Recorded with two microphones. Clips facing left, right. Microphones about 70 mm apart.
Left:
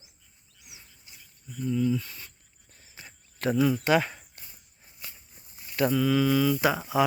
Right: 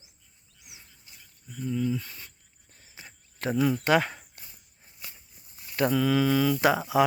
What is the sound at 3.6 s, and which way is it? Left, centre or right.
Speech, centre.